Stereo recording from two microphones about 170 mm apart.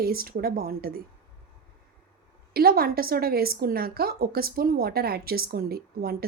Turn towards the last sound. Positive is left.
turn(degrees=-60)  # may be behind; listen again after turning